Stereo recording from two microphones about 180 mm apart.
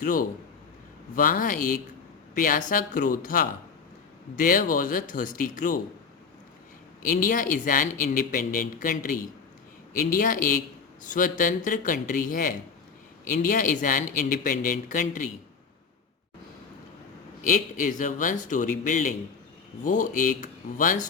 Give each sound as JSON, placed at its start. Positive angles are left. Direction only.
{"t": 0.0, "sound": "speech", "side_deg": 50}
{"t": 7.0, "sound": "speech", "side_deg": 50}
{"t": 17.4, "sound": "speech", "side_deg": 45}